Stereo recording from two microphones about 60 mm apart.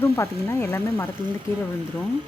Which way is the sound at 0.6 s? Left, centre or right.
Left.